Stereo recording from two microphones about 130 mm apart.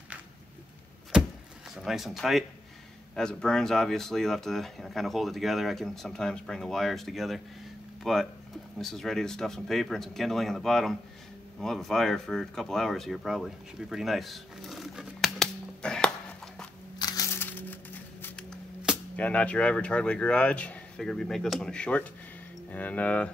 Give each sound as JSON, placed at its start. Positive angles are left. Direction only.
{"t": 1.1, "sound": "vehicle", "side_deg": -5}
{"t": 1.8, "sound": "speech", "side_deg": 0}
{"t": 17.0, "sound": "crushing", "side_deg": 25}
{"t": 19.1, "sound": "speech", "side_deg": 10}